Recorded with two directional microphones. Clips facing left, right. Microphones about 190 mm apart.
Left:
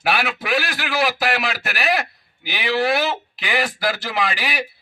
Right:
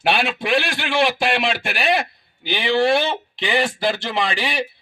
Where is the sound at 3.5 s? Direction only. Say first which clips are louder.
Right 2 dB; 25° right (ahead or behind).